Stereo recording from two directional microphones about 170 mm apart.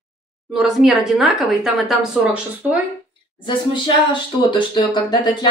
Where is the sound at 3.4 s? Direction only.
25° left (ahead or behind).